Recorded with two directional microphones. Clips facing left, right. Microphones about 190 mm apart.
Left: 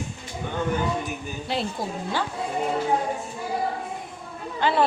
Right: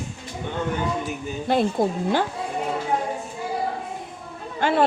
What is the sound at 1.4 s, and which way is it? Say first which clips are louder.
Speech: right 8 dB; 50° right (ahead or behind).